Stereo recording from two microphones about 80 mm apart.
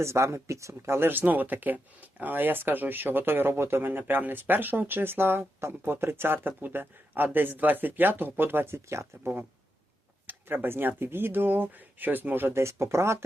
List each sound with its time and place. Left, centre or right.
0.0 s speech: right